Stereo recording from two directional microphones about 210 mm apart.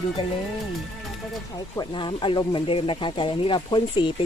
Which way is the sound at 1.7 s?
20° left (ahead or behind).